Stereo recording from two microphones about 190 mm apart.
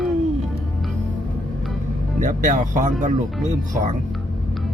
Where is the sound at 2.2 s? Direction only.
45° right (ahead or behind).